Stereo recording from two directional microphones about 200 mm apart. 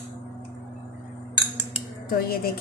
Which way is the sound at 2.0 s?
45° left (ahead or behind).